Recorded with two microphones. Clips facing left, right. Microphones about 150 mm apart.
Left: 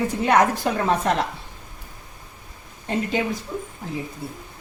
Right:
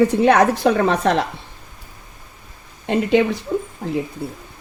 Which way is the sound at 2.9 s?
75° right (ahead or behind).